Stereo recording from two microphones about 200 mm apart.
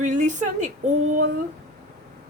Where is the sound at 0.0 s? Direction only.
40° right (ahead or behind).